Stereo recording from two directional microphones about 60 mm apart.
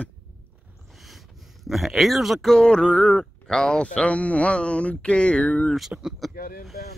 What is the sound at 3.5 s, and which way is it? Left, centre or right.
Speech, centre.